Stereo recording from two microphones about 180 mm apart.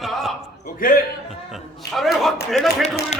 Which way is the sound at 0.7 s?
55° left (ahead or behind).